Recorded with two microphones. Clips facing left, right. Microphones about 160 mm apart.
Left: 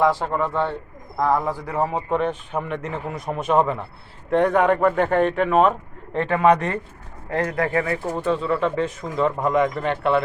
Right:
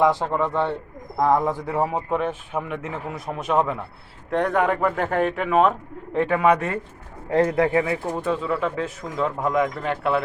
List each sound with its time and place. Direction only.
0.0 s speech: 20° right (ahead or behind)
1.9 s speech: 5° right (ahead or behind)
7.3 s speech: 20° right (ahead or behind)
8.1 s speech: 5° right (ahead or behind)